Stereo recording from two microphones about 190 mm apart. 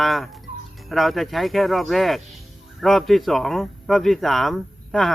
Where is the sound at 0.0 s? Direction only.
Centre (ahead or behind).